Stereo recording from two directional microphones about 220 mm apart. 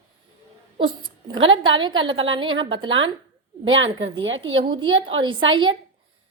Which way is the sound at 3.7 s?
60° right (ahead or behind).